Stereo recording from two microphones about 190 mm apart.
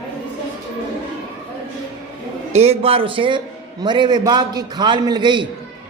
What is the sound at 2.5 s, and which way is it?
A man's voice, 35° right (ahead or behind).